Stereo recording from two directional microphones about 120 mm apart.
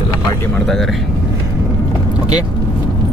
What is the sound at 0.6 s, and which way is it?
Speech, 5° left (ahead or behind).